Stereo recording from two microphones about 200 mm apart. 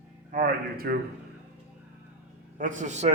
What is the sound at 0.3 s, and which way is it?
Speech, 45° right (ahead or behind).